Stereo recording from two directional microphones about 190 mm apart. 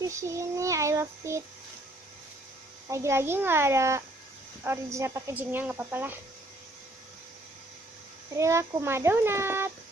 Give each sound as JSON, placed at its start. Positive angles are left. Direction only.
{"t": 0.0, "sound": "speech", "side_deg": -15}
{"t": 2.9, "sound": "speech", "side_deg": -15}
{"t": 8.4, "sound": "speech", "side_deg": -15}